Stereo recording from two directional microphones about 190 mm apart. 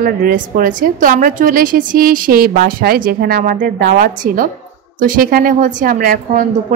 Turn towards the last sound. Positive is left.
turn(degrees=-45)  # may be behind; listen again after turning